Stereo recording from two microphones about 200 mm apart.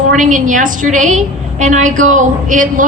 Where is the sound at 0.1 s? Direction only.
40° right (ahead or behind).